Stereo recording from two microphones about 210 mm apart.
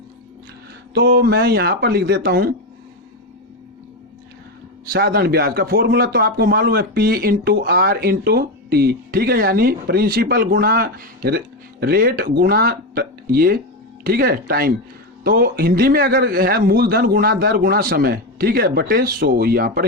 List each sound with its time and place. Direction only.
0.9 s a man's voice: 50° right (ahead or behind)
4.9 s a man's voice: 45° right (ahead or behind)